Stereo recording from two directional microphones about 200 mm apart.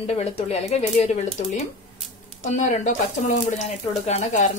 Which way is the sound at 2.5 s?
35° left (ahead or behind).